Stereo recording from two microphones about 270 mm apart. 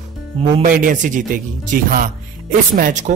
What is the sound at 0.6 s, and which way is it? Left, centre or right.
A man's voice, right.